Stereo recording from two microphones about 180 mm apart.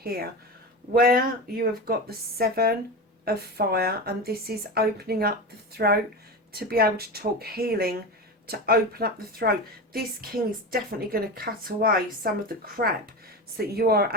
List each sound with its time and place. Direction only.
0.0 s a woman's voice: 60° right (ahead or behind)
12.8 s speech: 40° right (ahead or behind)
13.6 s a woman's voice: 60° right (ahead or behind)